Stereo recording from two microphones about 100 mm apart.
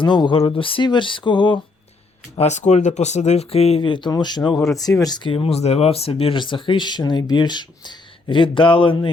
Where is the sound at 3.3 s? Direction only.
90° left.